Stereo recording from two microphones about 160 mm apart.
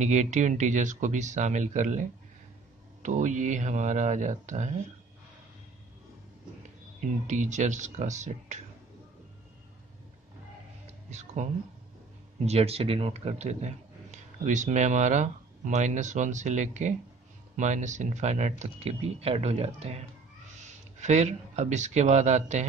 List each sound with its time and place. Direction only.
0.0 s speech: 50° right (ahead or behind)
7.2 s speech: 50° right (ahead or behind)
10.9 s music: 45° right (ahead or behind)
12.4 s speech: 40° right (ahead or behind)